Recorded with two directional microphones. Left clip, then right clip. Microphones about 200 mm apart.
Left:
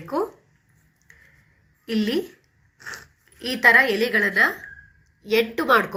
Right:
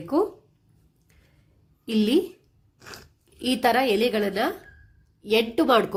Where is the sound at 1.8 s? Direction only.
60° right (ahead or behind).